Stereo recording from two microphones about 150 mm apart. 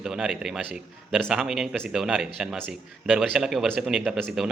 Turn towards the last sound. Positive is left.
turn(degrees=-5)  # may be behind; listen again after turning